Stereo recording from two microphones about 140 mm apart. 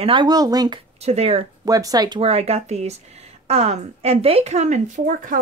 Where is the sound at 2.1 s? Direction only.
45° right (ahead or behind).